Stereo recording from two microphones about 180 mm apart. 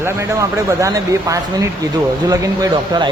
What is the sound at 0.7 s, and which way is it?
Speech, 15° right (ahead or behind).